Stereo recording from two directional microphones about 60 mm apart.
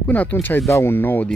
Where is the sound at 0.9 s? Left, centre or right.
Left.